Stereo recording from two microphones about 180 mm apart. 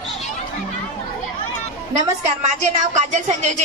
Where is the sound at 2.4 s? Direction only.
40° right (ahead or behind).